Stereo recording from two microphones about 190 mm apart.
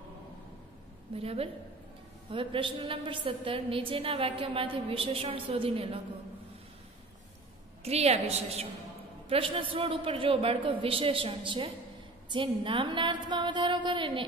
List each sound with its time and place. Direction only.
1.1 s a woman's voice: 30° right (ahead or behind)
7.8 s a woman's voice: 35° right (ahead or behind)